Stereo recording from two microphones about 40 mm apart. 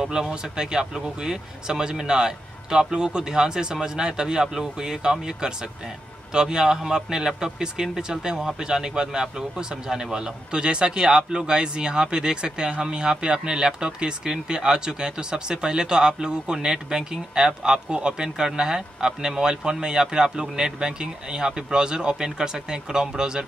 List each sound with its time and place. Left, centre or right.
0.0 s speech: centre
17.8 s speech: right